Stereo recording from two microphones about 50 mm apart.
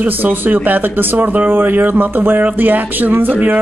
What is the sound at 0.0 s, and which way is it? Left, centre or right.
A woman's voice, right.